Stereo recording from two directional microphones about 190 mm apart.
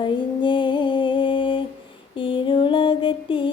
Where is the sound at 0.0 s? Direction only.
25° left (ahead or behind).